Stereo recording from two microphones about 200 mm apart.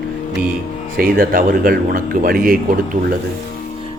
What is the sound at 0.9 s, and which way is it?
Speech, 45° right (ahead or behind).